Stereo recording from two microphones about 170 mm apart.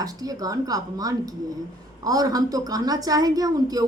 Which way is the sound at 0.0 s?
20° right (ahead or behind).